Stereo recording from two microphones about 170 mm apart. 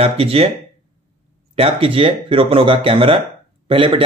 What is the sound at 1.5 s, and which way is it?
Speech, 35° right (ahead or behind).